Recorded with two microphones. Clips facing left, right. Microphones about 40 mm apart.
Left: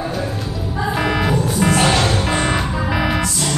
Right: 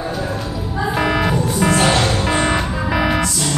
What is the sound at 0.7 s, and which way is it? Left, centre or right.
Music, centre.